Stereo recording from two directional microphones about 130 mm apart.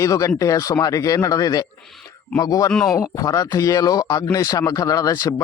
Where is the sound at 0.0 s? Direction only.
25° left (ahead or behind).